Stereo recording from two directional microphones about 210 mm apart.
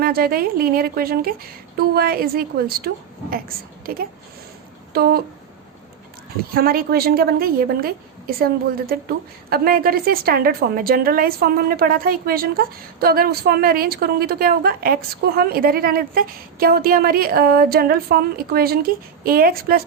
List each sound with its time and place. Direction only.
0.0 s a woman's voice: 45° right (ahead or behind)
4.9 s a woman's voice: 50° right (ahead or behind)
6.5 s a woman's voice: 45° right (ahead or behind)